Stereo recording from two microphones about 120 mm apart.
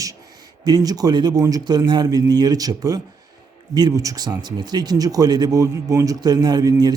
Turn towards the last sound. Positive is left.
turn(degrees=-30)  # may be behind; listen again after turning